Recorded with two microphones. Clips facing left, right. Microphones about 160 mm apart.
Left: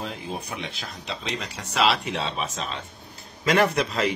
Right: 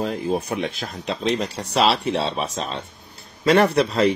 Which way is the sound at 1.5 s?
35° right (ahead or behind).